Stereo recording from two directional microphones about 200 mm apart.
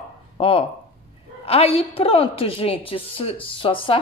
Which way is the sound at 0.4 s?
30° left (ahead or behind).